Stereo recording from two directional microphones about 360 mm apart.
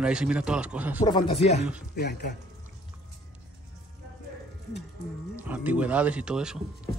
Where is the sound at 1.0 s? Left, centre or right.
Centre.